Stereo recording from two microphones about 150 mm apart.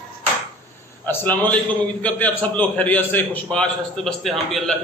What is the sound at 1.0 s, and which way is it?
A man's voice, 15° left (ahead or behind).